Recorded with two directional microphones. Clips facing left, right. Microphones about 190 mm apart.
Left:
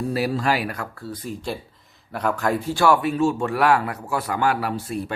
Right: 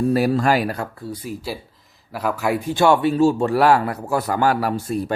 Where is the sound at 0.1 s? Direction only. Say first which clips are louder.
Right 3 dB; 50° right (ahead or behind).